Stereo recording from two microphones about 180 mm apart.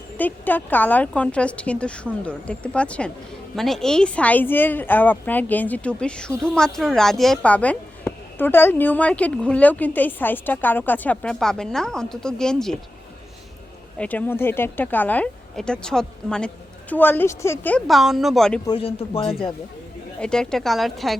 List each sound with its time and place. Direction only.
0.2 s speech: 10° left (ahead or behind)
14.0 s speech: 10° left (ahead or behind)
18.6 s speech: 30° left (ahead or behind)
20.1 s speech: 5° left (ahead or behind)